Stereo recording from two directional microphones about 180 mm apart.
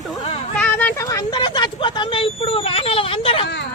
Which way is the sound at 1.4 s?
25° left (ahead or behind).